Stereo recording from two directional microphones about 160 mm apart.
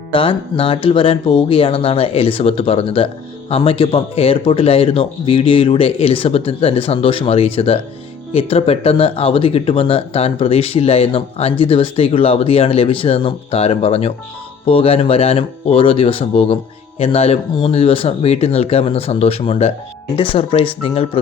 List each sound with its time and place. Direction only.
0.1 s speech: 35° left (ahead or behind)